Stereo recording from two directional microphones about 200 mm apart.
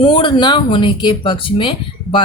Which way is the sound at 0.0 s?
25° left (ahead or behind).